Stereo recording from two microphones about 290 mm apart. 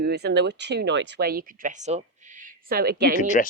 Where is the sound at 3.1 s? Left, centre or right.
Left.